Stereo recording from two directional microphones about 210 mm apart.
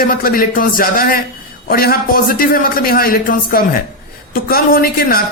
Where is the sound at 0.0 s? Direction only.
45° left (ahead or behind).